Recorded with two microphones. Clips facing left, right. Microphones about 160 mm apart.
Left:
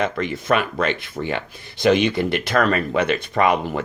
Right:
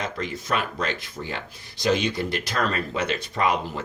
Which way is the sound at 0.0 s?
60° left (ahead or behind).